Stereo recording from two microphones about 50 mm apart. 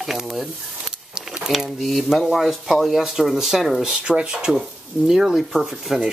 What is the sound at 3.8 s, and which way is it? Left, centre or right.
Speech, centre.